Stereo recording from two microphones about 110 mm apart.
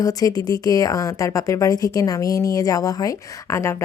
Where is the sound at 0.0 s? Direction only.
35° left (ahead or behind).